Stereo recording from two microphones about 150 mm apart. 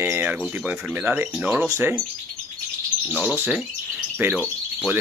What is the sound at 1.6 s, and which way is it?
Speech, 15° right (ahead or behind).